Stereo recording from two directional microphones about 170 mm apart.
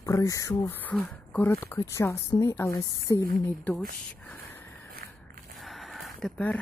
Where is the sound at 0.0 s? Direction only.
20° left (ahead or behind).